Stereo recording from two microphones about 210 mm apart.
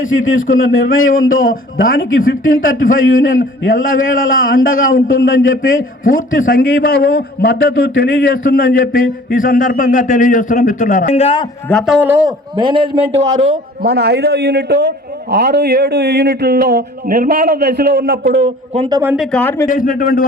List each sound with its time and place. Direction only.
0.0 s a man's voice: 70° left (ahead or behind)
1.5 s a man's voice: 40° left (ahead or behind)
2.0 s a man's voice: 70° left (ahead or behind)
6.3 s a man's voice: 40° left (ahead or behind)
11.7 s a man's voice: centre (ahead or behind)
12.5 s a man's voice: 25° right (ahead or behind)
13.8 s a man's voice: 50° right (ahead or behind)
18.7 s a man's voice: 30° right (ahead or behind)
19.1 s a man's voice: centre (ahead or behind)
19.6 s speech: 40° left (ahead or behind)